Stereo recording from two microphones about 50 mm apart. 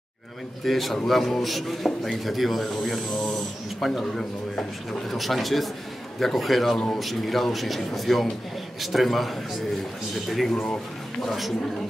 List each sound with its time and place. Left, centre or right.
0.7 s a man's voice: centre